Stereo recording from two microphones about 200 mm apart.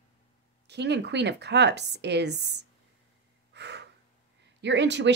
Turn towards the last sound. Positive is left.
turn(degrees=-60)  # may be behind; listen again after turning